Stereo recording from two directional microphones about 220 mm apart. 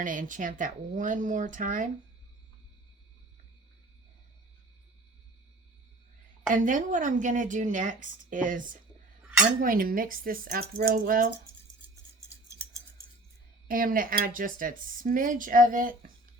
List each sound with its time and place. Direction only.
0.0 s speech: 35° right (ahead or behind)
6.5 s speech: 35° right (ahead or behind)
13.7 s speech: 40° right (ahead or behind)